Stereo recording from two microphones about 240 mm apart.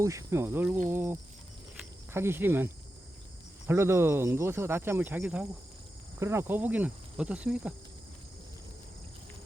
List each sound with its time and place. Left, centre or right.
0.0 s speech: centre
1.8 s cricket: centre
3.7 s speech: centre